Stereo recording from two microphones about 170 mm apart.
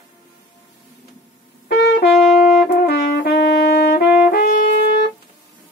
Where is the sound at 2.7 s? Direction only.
60° left (ahead or behind).